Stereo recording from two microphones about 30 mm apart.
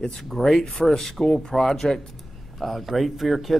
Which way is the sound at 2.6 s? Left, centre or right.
Centre.